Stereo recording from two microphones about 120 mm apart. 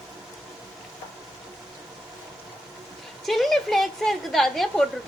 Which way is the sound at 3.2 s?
Centre (ahead or behind).